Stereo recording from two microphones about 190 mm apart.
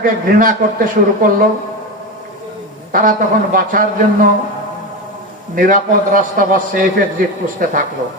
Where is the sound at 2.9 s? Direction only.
45° right (ahead or behind).